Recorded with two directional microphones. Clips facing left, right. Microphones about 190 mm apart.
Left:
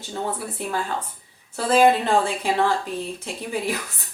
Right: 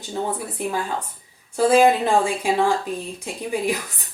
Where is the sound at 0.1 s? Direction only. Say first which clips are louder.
Right 2 dB; 15° right (ahead or behind).